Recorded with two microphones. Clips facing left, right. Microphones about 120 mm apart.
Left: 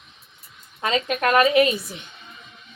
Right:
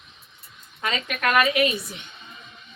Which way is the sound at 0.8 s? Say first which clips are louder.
Left 4 dB; 30° left (ahead or behind).